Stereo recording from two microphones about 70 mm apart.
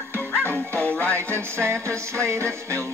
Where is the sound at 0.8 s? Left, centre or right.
Left.